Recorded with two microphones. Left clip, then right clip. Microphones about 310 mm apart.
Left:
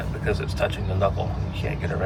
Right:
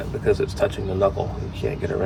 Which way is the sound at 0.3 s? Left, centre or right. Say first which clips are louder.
Right 5 dB; centre.